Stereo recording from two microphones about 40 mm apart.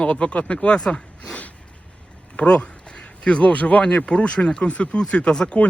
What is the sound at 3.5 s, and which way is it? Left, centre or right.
Speech, left.